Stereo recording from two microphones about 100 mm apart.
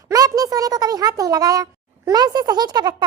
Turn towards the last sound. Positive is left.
turn(degrees=-45)  # may be behind; listen again after turning